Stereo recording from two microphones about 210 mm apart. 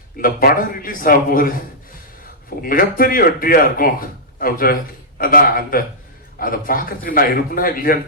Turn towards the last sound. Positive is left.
turn(degrees=45)  # may be behind; listen again after turning